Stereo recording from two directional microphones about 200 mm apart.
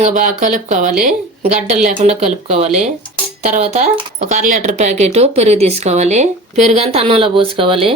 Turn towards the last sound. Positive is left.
turn(degrees=-25)  # may be behind; listen again after turning